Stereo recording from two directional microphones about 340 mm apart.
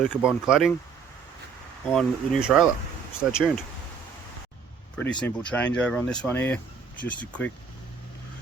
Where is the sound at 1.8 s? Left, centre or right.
Centre.